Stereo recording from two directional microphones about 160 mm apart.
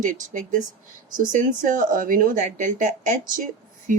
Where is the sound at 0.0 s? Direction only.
55° right (ahead or behind).